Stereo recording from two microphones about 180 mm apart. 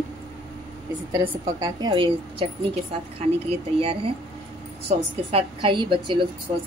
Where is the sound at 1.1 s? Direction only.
20° right (ahead or behind).